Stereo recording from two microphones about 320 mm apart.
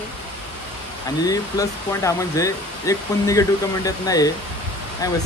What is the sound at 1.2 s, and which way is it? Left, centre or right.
Speech, centre.